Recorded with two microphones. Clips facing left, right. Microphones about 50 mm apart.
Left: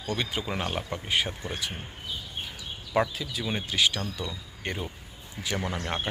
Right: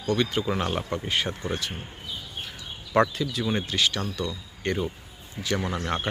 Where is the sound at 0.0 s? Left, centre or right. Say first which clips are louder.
Right 6 dB; centre.